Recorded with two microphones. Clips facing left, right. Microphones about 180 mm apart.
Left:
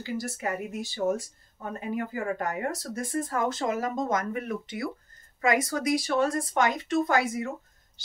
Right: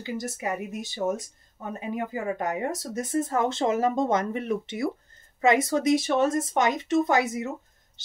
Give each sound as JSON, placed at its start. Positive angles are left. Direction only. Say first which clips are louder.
{"t": 0.0, "sound": "speech", "louder": "right 1 dB", "side_deg": -20}